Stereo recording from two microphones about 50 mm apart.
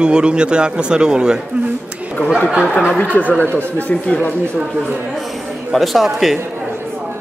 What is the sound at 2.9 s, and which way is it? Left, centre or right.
Speech, left.